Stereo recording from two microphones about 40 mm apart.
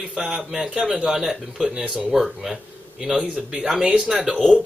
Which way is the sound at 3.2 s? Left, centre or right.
Right.